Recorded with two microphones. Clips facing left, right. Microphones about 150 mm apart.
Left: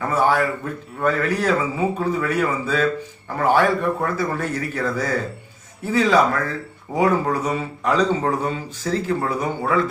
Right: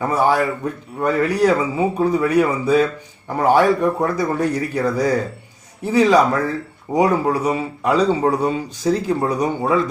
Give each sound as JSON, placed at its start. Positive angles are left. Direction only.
{"t": 0.1, "sound": "a man's voice", "side_deg": -15}